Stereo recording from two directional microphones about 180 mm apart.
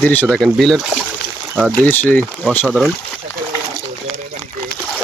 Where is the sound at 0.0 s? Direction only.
10° left (ahead or behind).